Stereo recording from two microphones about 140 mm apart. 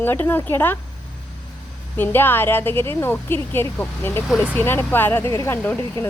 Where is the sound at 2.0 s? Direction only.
15° left (ahead or behind).